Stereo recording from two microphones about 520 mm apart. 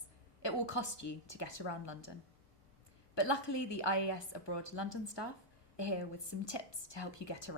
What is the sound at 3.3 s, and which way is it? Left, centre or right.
A woman's voice, left.